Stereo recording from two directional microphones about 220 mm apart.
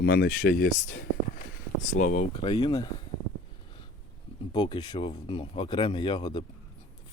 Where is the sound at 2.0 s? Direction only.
35° left (ahead or behind).